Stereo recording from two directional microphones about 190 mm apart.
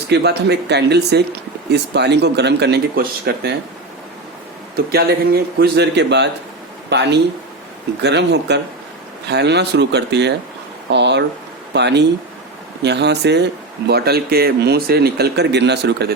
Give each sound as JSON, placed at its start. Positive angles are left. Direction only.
{"t": 0.1, "sound": "a man's voice", "side_deg": -60}
{"t": 4.9, "sound": "a man's voice", "side_deg": -55}